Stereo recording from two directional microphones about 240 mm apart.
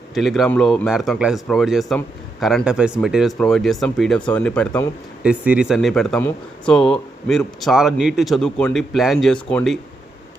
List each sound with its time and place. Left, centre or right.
0.1 s a man's voice: centre